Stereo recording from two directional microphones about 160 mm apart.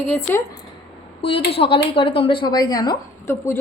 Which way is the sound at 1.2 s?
35° left (ahead or behind).